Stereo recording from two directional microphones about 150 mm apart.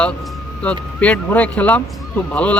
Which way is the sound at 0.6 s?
10° left (ahead or behind).